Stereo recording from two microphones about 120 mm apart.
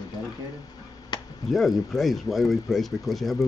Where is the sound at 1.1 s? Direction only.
35° left (ahead or behind).